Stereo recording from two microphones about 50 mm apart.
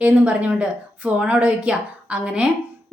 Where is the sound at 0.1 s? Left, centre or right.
Right.